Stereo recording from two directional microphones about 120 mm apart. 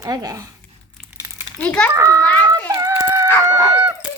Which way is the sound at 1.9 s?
30° right (ahead or behind).